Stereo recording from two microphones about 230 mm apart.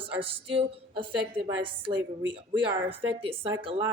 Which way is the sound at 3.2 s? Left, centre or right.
Right.